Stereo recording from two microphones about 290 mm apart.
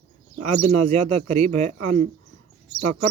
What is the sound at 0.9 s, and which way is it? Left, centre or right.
Speech, right.